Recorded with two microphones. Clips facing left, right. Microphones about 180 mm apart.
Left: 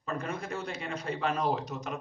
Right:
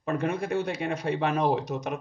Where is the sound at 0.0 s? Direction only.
60° right (ahead or behind).